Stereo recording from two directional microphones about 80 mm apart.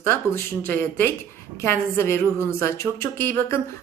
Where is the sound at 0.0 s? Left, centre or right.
Left.